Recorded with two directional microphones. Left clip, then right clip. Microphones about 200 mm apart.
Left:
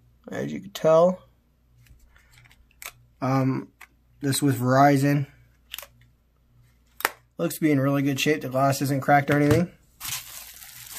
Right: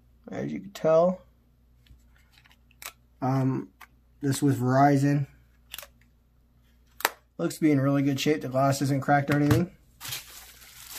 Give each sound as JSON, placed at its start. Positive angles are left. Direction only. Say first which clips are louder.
{"t": 0.2, "sound": "speech", "louder": "left 3 dB", "side_deg": 15}
{"t": 2.4, "sound": "scissors", "louder": "left 2 dB", "side_deg": 0}
{"t": 3.2, "sound": "speech", "louder": "left 3 dB", "side_deg": 15}
{"t": 7.0, "sound": "speech", "louder": "left 2 dB", "side_deg": 10}